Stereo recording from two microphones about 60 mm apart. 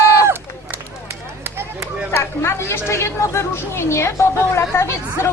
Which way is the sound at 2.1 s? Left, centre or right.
Left.